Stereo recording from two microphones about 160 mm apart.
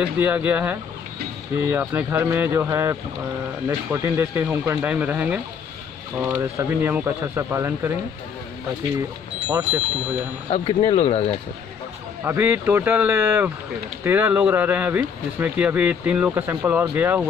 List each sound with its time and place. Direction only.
0.0 s speech: 10° right (ahead or behind)
9.5 s speech: 10° right (ahead or behind)
10.5 s speech: 35° left (ahead or behind)
12.3 s speech: 10° right (ahead or behind)